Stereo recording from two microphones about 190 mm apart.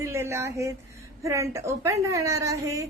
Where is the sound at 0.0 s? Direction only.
15° right (ahead or behind).